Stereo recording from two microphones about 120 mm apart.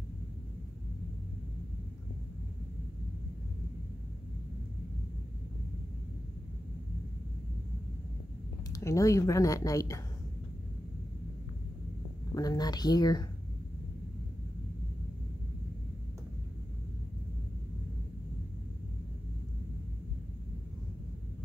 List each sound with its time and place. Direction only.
8.7 s speech: 25° left (ahead or behind)
12.4 s speech: 35° left (ahead or behind)